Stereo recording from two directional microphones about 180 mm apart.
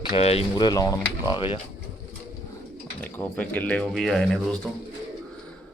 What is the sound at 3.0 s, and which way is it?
Speech, 10° left (ahead or behind).